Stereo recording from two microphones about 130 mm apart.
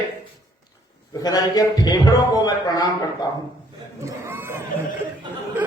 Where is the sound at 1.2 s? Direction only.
30° left (ahead or behind).